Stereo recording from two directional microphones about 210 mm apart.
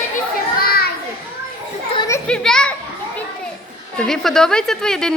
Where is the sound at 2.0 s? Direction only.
15° left (ahead or behind).